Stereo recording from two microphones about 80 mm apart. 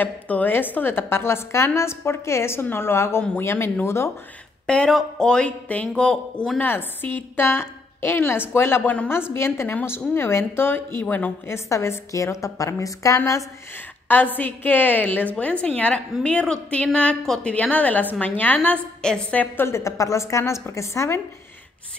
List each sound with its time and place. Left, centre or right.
0.0 s a woman's voice: left
4.6 s a woman's voice: centre
11.4 s a woman's voice: left
14.0 s a woman's voice: left